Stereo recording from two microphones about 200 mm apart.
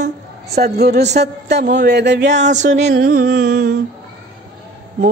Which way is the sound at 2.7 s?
65° right (ahead or behind).